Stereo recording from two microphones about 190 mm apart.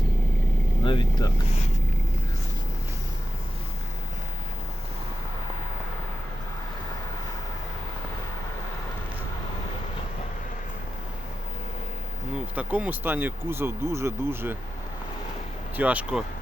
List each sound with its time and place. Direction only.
0.9 s speech: 25° left (ahead or behind)
12.3 s speech: 5° right (ahead or behind)
15.7 s speech: 10° right (ahead or behind)